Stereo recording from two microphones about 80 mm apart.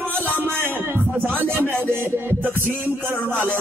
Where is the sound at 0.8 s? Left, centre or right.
Right.